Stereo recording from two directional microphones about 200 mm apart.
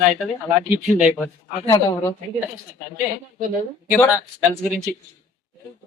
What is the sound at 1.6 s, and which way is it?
Speech, 15° left (ahead or behind).